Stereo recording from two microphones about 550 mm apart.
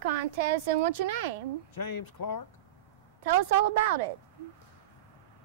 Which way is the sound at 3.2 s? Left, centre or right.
Right.